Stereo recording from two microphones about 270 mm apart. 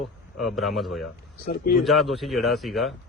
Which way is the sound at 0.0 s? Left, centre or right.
Centre.